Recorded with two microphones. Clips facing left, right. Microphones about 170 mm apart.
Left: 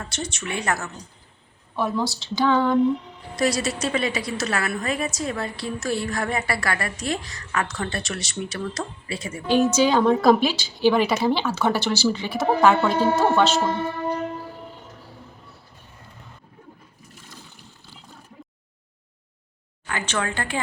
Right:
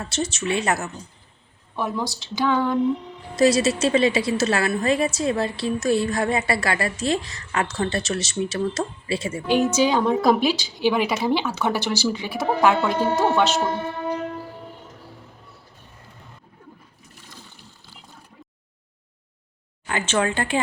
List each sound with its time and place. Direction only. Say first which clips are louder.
0.0 s a woman's voice: right 5 dB; 25° right (ahead or behind)
3.3 s a woman's voice: right 5 dB; 25° right (ahead or behind)
9.5 s a woman's voice: left 1 dB; 15° right (ahead or behind)
19.9 s a woman's voice: right 4 dB; 25° right (ahead or behind)